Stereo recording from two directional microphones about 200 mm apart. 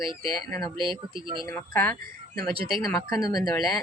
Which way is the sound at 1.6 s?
10° left (ahead or behind).